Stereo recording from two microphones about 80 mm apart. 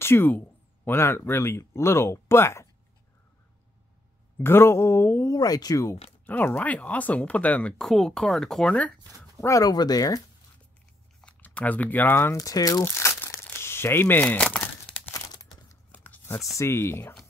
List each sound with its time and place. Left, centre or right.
0.0 s speech: left
4.4 s mantra: left
5.3 s speech: left
6.2 s speech: left
7.8 s speech: centre
9.4 s speech: left
11.2 s speech: centre
12.4 s speech: left
12.8 s crumpling: left; by 15.0 s centre
15.9 s a sound: left
16.5 s mantra: left